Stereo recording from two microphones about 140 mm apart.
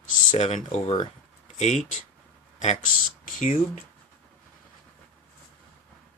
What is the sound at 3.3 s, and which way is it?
Speech, 65° left (ahead or behind).